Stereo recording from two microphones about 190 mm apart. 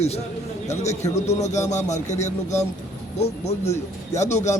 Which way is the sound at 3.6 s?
15° left (ahead or behind).